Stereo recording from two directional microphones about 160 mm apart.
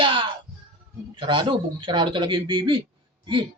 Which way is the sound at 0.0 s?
30° right (ahead or behind).